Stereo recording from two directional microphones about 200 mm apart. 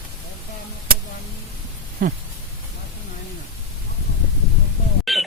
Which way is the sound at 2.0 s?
45° right (ahead or behind).